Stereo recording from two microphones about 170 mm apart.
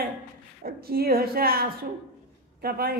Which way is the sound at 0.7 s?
65° right (ahead or behind).